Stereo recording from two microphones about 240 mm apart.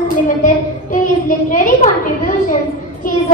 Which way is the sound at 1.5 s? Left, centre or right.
Left.